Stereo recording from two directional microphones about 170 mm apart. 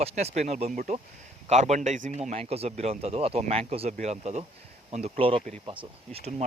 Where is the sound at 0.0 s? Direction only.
40° right (ahead or behind).